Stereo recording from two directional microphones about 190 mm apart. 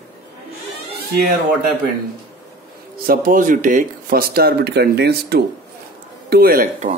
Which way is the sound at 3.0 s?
45° right (ahead or behind).